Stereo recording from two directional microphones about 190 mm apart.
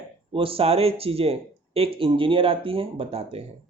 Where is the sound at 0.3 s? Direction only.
30° right (ahead or behind).